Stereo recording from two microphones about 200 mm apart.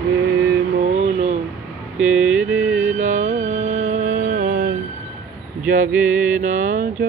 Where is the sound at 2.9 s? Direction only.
35° right (ahead or behind).